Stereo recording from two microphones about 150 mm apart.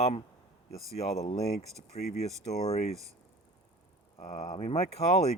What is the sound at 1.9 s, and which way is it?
Speech, 40° left (ahead or behind).